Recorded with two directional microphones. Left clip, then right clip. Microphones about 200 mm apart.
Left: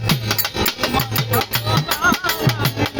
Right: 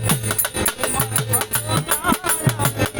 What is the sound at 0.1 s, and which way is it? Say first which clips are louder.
Music: left 4 dB; 20° left (ahead or behind).